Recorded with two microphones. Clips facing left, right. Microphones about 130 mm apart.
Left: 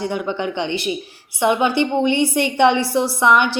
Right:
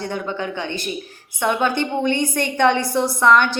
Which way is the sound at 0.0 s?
15° left (ahead or behind).